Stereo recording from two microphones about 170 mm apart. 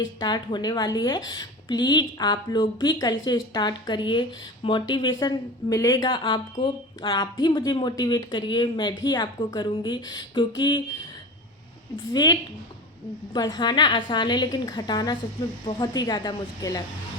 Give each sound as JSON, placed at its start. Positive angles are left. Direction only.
{"t": 0.0, "sound": "a woman's voice", "side_deg": 25}
{"t": 12.1, "sound": "a woman's voice", "side_deg": 25}